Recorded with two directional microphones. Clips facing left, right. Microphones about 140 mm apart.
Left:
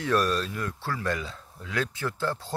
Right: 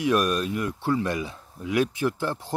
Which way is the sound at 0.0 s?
15° right (ahead or behind).